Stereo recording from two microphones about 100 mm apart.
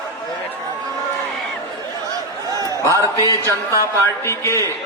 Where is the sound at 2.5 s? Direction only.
35° right (ahead or behind).